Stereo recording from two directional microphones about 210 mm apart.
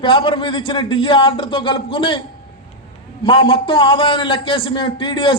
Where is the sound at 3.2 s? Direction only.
25° left (ahead or behind).